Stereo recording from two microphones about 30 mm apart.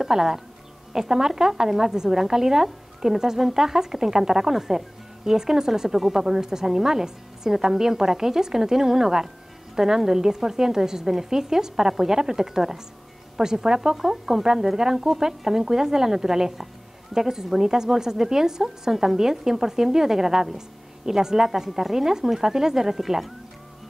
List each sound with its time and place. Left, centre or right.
0.0 s a woman's voice: centre
5.9 s a woman's voice: centre
6.2 s a woman's voice: centre
13.9 s speech: centre
14.4 s a woman's voice: centre